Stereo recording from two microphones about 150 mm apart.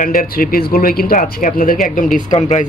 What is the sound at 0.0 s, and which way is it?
Speech, 70° left (ahead or behind).